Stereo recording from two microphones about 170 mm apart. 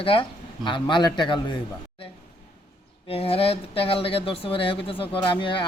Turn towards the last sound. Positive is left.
turn(degrees=30)  # may be behind; listen again after turning